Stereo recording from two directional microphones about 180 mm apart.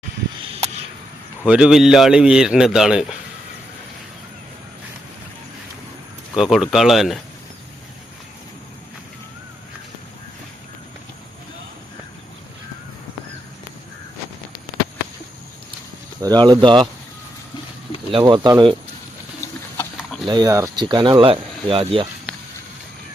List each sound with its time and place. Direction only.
1.5 s a man's voice: 5° right (ahead or behind)
6.3 s a man's voice: centre (ahead or behind)
16.2 s speech: 25° right (ahead or behind)
18.1 s speech: 25° right (ahead or behind)
19.4 s bird: 15° left (ahead or behind)
20.2 s speech: 20° right (ahead or behind)